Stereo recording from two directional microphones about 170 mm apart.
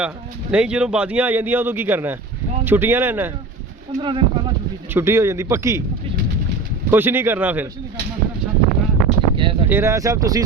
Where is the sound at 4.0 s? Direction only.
30° right (ahead or behind).